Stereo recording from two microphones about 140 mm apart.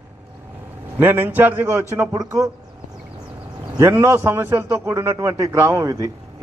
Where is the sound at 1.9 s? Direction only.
25° right (ahead or behind).